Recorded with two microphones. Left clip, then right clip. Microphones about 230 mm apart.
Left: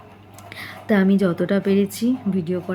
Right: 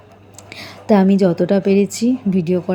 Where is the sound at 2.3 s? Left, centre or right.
Right.